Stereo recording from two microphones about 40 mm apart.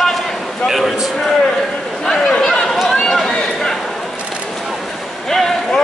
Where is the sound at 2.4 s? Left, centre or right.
Centre.